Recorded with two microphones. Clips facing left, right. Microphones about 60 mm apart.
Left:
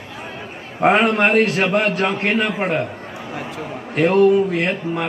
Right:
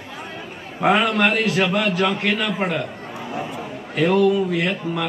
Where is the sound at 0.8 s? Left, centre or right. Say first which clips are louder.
Left 3 dB; left.